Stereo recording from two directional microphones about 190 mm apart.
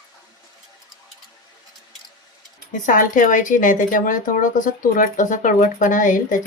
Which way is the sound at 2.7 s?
45° left (ahead or behind).